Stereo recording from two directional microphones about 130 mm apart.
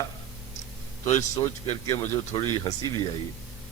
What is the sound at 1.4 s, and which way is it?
A man's voice, 35° left (ahead or behind).